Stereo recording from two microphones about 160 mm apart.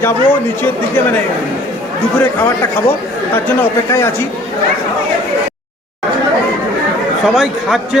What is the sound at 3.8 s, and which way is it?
Speech, 20° left (ahead or behind).